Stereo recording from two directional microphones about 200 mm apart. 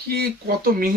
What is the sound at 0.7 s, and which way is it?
Speech, 45° right (ahead or behind).